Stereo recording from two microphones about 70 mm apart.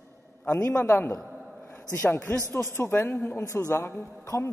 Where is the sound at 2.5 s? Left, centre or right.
Left.